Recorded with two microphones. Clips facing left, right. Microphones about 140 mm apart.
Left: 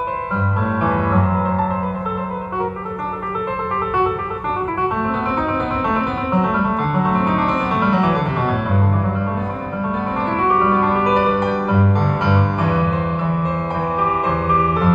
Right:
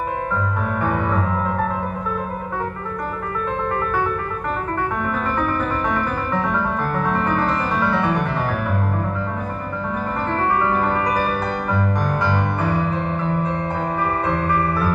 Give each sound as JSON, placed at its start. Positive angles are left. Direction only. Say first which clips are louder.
{"t": 0.7, "sound": "music", "louder": "left 4 dB", "side_deg": 20}
{"t": 5.0, "sound": "music", "louder": "left 2 dB", "side_deg": 20}
{"t": 10.3, "sound": "music", "louder": "left 3 dB", "side_deg": 20}
{"t": 12.6, "sound": "music", "louder": "left 3 dB", "side_deg": 75}
{"t": 14.2, "sound": "music", "louder": "left 2 dB", "side_deg": 20}